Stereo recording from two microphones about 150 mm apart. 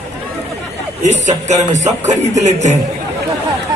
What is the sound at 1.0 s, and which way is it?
Speech, 50° right (ahead or behind).